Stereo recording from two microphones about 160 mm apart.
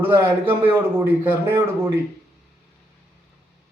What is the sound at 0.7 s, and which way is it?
A man's voice, 15° right (ahead or behind).